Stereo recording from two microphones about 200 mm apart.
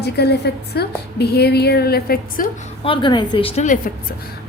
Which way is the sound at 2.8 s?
25° left (ahead or behind).